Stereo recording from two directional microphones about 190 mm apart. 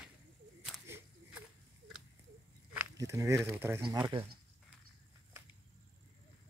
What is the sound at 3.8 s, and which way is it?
Speech, 25° right (ahead or behind).